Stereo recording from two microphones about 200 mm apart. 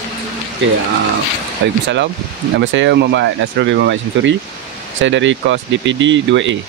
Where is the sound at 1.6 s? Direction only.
60° right (ahead or behind).